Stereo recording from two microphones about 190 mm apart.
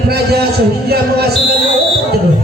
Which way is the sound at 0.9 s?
55° right (ahead or behind).